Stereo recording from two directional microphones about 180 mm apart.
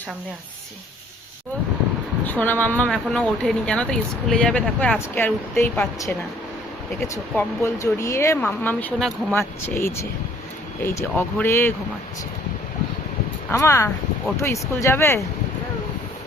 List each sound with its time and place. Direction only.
2.2 s speech: 10° left (ahead or behind)
13.5 s speech: 15° left (ahead or behind)